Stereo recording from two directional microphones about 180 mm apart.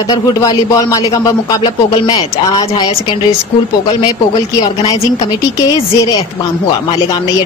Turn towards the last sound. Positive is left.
turn(degrees=20)  # may be behind; listen again after turning